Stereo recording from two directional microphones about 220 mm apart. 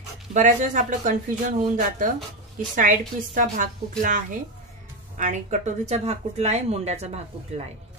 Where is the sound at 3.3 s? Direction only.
35° right (ahead or behind).